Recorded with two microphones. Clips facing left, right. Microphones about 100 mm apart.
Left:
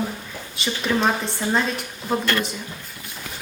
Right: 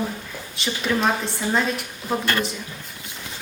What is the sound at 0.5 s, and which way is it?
A woman's voice, centre (ahead or behind).